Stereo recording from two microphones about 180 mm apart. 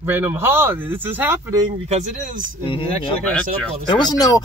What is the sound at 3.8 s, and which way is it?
Speech, 20° left (ahead or behind).